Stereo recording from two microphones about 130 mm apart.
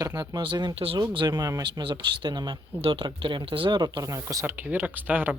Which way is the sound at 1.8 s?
40° right (ahead or behind).